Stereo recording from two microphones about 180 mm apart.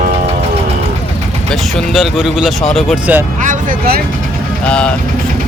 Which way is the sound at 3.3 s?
45° right (ahead or behind).